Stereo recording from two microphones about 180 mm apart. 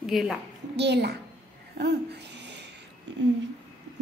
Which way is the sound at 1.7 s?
70° right (ahead or behind).